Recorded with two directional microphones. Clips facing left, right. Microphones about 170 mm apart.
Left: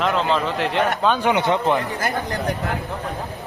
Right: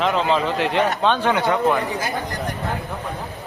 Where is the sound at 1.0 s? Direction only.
10° left (ahead or behind).